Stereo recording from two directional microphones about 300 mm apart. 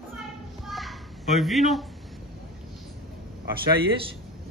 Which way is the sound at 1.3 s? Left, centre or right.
Centre.